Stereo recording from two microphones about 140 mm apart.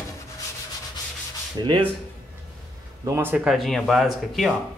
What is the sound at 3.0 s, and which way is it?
Speech, 20° right (ahead or behind).